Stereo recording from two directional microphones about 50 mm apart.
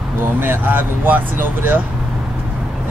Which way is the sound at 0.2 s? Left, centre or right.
Right.